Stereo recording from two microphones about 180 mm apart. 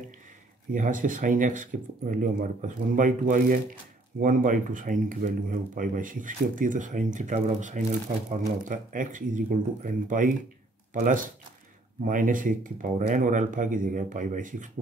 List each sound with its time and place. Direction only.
0.7 s speech: 45° right (ahead or behind)